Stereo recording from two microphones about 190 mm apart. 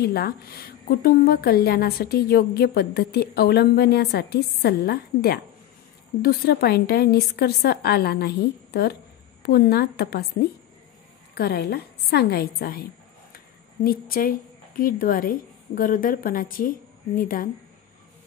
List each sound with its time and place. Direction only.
0.0 s a woman's voice: 55° left (ahead or behind)
11.3 s a woman's voice: 55° left (ahead or behind)